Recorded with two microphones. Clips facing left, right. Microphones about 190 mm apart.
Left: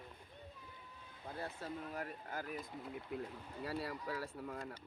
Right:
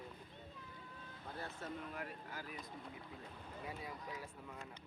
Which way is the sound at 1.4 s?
35° left (ahead or behind).